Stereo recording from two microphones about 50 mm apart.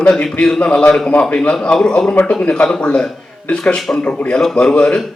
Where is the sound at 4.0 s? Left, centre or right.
Left.